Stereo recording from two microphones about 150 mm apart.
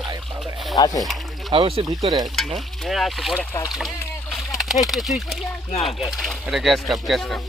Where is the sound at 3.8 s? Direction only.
Centre (ahead or behind).